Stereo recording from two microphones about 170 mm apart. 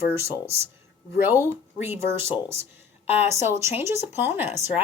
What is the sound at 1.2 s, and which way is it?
Speech, 10° right (ahead or behind).